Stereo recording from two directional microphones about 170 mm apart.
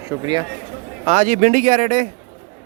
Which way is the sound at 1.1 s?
50° right (ahead or behind).